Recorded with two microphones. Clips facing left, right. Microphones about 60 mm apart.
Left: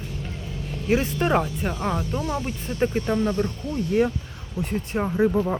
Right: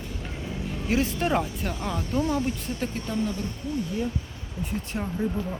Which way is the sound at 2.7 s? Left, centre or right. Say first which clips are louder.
Left 6 dB; left.